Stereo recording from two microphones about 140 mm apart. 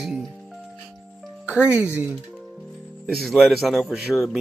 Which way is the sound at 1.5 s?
10° right (ahead or behind).